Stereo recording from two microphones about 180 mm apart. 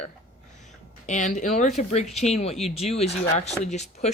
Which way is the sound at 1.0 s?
40° left (ahead or behind).